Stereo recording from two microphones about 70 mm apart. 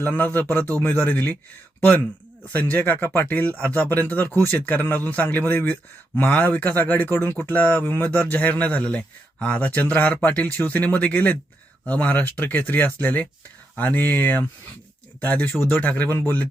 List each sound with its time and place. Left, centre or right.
0.0 s speech: left
2.4 s speech: left